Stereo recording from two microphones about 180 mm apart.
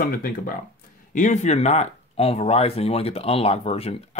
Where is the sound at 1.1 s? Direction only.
40° left (ahead or behind).